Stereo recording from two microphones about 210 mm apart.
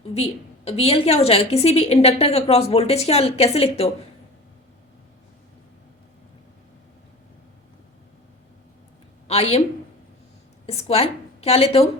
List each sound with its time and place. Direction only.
0.1 s a woman's voice: 30° left (ahead or behind)
9.2 s a woman's voice: 30° left (ahead or behind)
10.7 s a woman's voice: 30° left (ahead or behind)